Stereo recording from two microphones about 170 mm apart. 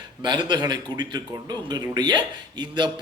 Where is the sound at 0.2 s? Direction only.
30° right (ahead or behind).